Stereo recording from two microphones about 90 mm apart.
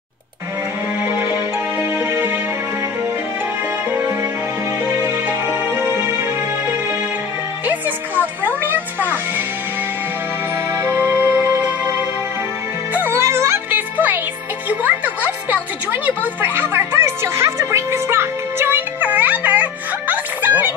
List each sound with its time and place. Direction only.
1.0 s music: 25° right (ahead or behind)
5.0 s music: 30° right (ahead or behind)
7.6 s music: 20° right (ahead or behind)
10.7 s music: 25° right (ahead or behind)